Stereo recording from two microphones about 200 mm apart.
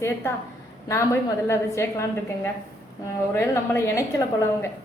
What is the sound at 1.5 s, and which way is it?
Speech, 15° left (ahead or behind).